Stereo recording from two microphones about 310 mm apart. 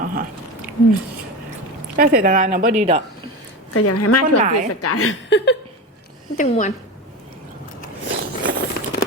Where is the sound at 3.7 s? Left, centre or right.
Left.